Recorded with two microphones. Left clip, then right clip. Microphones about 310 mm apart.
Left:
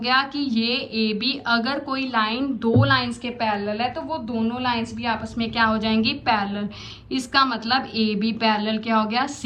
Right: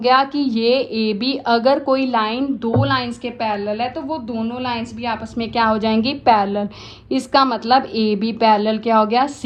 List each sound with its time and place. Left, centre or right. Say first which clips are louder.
0.0 s a woman's voice: right 6 dB; centre